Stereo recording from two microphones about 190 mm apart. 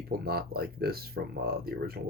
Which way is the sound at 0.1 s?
55° right (ahead or behind).